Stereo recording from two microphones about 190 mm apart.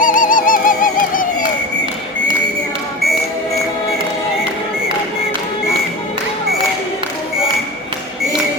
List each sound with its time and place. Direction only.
0.0 s bird: 45° left (ahead or behind)